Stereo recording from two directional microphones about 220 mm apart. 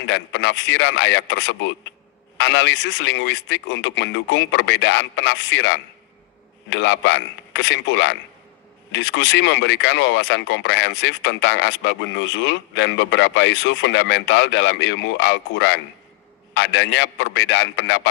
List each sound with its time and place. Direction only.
0.0 s speech: 55° left (ahead or behind)